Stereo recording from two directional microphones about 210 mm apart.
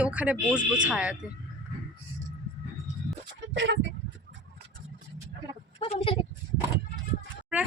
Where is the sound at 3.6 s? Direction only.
60° right (ahead or behind).